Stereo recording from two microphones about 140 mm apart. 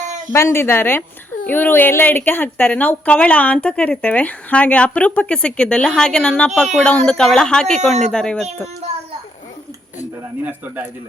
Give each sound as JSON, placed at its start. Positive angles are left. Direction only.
{"t": 0.3, "sound": "a woman's voice", "side_deg": 20}